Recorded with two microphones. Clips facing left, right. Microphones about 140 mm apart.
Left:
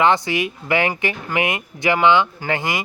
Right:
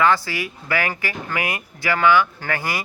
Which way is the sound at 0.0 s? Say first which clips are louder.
Left 2 dB; 20° left (ahead or behind).